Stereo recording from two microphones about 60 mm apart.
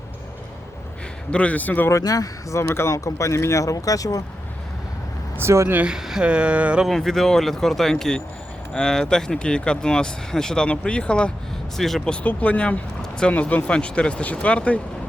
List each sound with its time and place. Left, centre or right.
1.3 s speech: left
1.9 s speech: left
2.6 s speech: left
5.4 s speech: right
6.0 s speech: centre
6.2 s a sound: centre
6.8 s speech: centre
11.8 s speech: centre
12.2 s speech: left
13.0 s a sound: centre
13.3 s speech: left